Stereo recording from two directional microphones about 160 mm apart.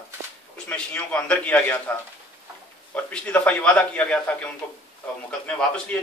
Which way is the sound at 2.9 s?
10° left (ahead or behind).